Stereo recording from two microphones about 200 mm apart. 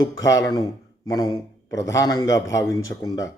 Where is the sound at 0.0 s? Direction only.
15° left (ahead or behind).